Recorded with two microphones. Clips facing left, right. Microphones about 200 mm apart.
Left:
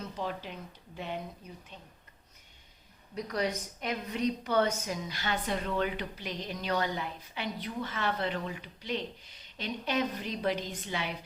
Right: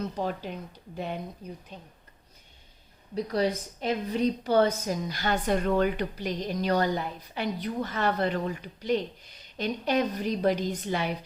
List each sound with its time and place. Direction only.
0.2 s a woman's voice: 45° right (ahead or behind)
3.2 s a woman's voice: 30° right (ahead or behind)